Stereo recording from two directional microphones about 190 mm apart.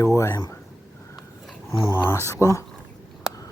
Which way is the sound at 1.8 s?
10° left (ahead or behind).